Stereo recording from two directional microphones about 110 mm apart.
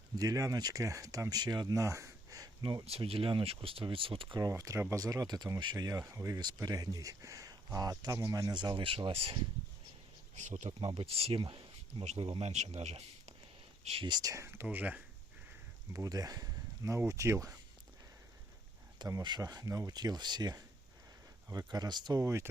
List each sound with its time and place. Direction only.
0.2 s speech: 35° right (ahead or behind)
2.8 s speech: 60° right (ahead or behind)
4.4 s speech: 30° right (ahead or behind); by 9.4 s 55° right (ahead or behind)
10.3 s speech: 90° right
10.8 s speech: 55° right (ahead or behind); by 13.3 s 75° right (ahead or behind)
14.0 s speech: 40° right (ahead or behind)
14.3 s speech: 25° right (ahead or behind)
15.9 s speech: 30° right (ahead or behind)
19.2 s speech: 40° right (ahead or behind)